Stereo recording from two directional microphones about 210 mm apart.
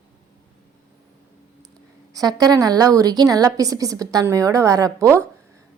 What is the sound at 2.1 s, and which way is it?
A woman's voice, 20° right (ahead or behind).